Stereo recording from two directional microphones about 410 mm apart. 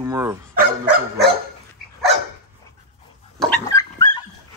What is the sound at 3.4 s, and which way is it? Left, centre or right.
Dog, centre.